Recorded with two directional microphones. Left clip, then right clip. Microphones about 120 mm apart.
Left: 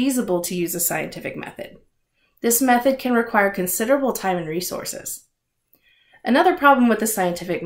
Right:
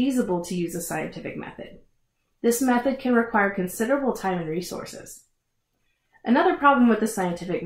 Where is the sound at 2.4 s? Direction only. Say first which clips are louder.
Left 4 dB; 15° left (ahead or behind).